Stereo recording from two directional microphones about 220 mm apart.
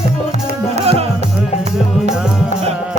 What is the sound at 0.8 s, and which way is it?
Music, 25° right (ahead or behind).